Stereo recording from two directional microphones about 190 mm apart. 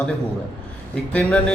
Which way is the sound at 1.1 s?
5° left (ahead or behind).